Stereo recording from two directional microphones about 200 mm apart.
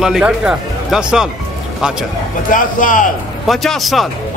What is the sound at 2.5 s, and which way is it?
Speech, 40° left (ahead or behind).